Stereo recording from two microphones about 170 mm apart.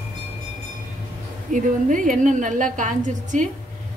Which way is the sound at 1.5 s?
50° right (ahead or behind).